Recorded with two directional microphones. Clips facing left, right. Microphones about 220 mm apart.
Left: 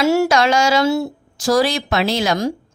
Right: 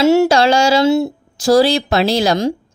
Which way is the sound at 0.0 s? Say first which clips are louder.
Right 4 dB; 25° right (ahead or behind).